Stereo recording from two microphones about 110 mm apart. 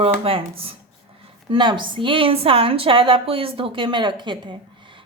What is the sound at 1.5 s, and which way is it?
A woman's voice, 45° right (ahead or behind).